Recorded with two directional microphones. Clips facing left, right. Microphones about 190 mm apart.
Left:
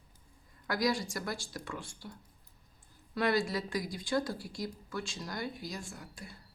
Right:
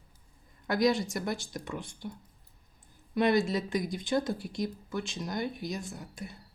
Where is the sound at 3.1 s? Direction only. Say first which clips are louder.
Right 5 dB; 20° right (ahead or behind).